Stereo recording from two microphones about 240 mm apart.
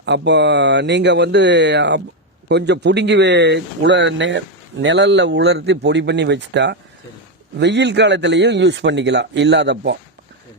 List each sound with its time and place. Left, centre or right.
0.0 s speech: right